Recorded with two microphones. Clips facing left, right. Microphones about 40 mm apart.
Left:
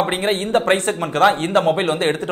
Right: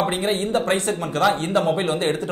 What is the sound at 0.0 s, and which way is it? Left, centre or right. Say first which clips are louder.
A man's voice: left 2 dB; left.